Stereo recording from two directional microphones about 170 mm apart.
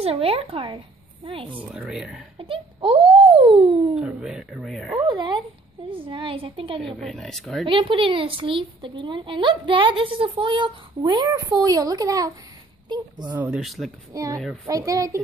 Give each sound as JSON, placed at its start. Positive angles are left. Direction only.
{"t": 0.0, "sound": "a woman's voice", "side_deg": -35}
{"t": 1.6, "sound": "speech", "side_deg": -5}
{"t": 2.3, "sound": "a child's voice", "side_deg": -30}
{"t": 4.0, "sound": "speech", "side_deg": -5}
{"t": 5.0, "sound": "a woman's voice", "side_deg": -25}
{"t": 6.8, "sound": "speech", "side_deg": 0}
{"t": 7.7, "sound": "a woman's voice", "side_deg": -30}
{"t": 13.3, "sound": "speech", "side_deg": -10}
{"t": 14.1, "sound": "a woman's voice", "side_deg": -20}